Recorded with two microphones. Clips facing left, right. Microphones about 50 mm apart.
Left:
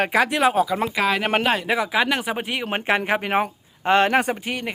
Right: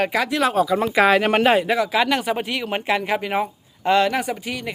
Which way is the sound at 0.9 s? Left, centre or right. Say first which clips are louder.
Right 7 dB; centre.